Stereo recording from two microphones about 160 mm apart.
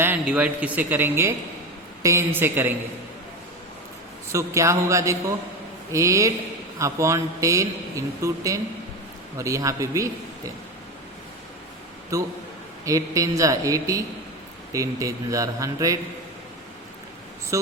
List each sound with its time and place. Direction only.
0.0 s a man's voice: 10° right (ahead or behind)
4.3 s a man's voice: 20° right (ahead or behind)
12.1 s a man's voice: 20° right (ahead or behind)
17.5 s a man's voice: 20° right (ahead or behind)